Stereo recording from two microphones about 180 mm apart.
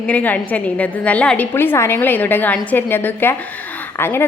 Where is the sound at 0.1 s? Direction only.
10° left (ahead or behind).